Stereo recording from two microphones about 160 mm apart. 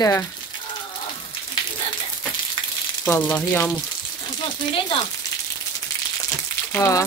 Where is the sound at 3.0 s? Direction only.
10° left (ahead or behind).